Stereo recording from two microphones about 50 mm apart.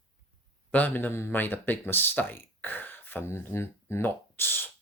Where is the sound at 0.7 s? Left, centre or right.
Left.